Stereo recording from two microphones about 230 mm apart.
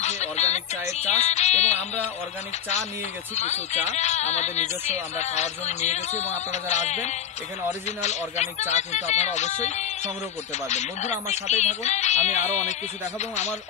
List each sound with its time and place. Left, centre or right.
0.0 s music: left
3.3 s speech: left